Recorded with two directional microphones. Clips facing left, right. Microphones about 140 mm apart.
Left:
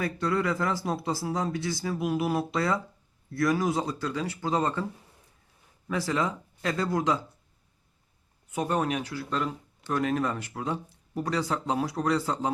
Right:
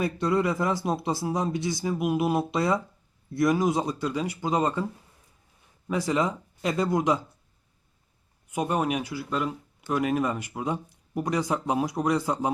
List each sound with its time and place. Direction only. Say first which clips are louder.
0.0 s speech: right 3 dB; 20° right (ahead or behind)
5.9 s speech: right 3 dB; 15° right (ahead or behind)
8.5 s speech: right 1 dB; 10° right (ahead or behind)